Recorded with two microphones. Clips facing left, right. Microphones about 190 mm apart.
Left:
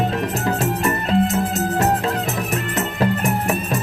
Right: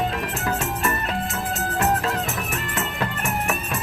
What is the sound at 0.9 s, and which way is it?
Music, 35° left (ahead or behind).